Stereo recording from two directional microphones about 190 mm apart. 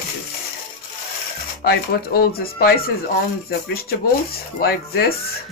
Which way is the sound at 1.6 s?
55° left (ahead or behind).